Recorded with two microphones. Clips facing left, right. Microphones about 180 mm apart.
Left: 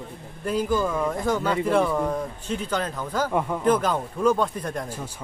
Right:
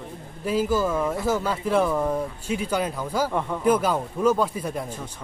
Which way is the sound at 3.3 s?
10° left (ahead or behind).